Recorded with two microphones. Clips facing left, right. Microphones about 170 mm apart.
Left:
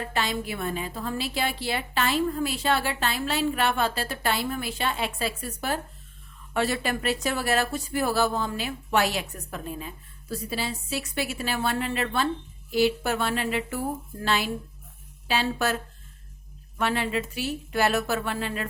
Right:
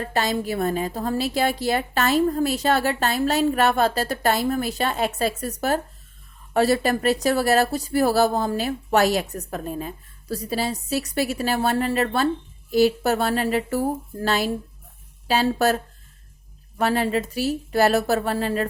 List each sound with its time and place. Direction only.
0.0 s speech: 40° right (ahead or behind)